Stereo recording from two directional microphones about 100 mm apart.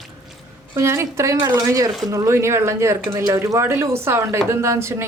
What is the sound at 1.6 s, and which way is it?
Speech, 35° right (ahead or behind).